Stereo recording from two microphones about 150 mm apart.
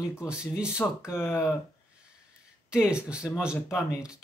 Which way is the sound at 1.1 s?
15° left (ahead or behind).